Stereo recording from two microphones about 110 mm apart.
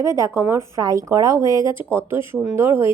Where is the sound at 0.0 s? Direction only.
25° right (ahead or behind).